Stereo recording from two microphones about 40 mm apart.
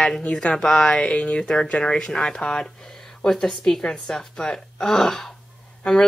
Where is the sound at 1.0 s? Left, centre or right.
Left.